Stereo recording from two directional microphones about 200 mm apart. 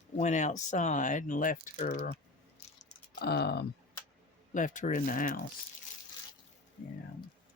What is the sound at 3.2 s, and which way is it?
Speech, 55° left (ahead or behind).